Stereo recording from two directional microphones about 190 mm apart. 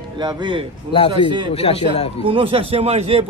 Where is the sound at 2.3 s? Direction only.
30° right (ahead or behind).